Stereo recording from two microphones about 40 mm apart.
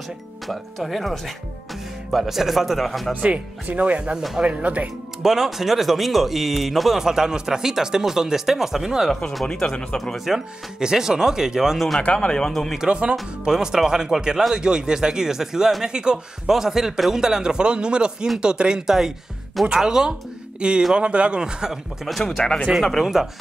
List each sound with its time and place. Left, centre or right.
0.5 s speech: centre
3.6 s speech: right
5.2 s speech: centre
7.0 s speech: centre
9.5 s speech: centre
10.1 s speech: centre
10.8 s speech: centre
12.0 s speech: left
12.7 s a man's voice: right
16.4 s a man's voice: centre
20.9 s a man's voice: right
22.4 s speech: left
23.2 s speech: centre